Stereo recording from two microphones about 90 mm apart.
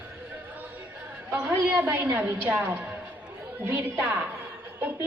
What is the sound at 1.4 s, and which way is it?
A woman's voice, 20° right (ahead or behind).